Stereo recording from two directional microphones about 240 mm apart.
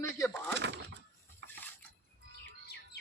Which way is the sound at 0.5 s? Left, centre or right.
Right.